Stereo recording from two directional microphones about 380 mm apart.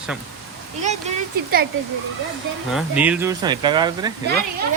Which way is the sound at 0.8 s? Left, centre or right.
Centre.